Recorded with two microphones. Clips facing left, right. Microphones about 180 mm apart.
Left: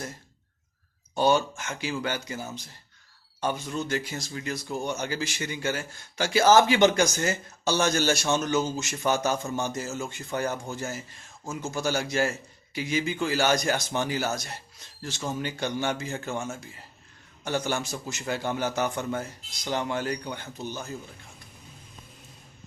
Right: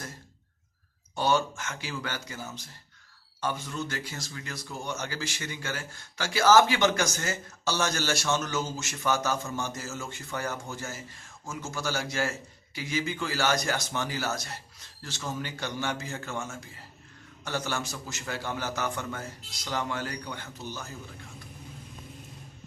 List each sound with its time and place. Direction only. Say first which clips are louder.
1.1 s speech: left 3 dB; 15° left (ahead or behind)
17.4 s speech: left 4 dB; 20° left (ahead or behind)